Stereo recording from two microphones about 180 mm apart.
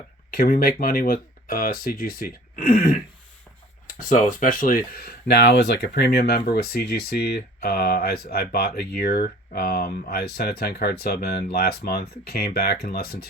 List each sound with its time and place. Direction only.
0.3 s speech: 55° left (ahead or behind)